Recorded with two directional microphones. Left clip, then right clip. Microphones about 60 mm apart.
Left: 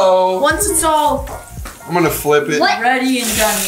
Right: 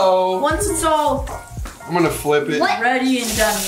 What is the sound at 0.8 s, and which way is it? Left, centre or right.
Speech, centre.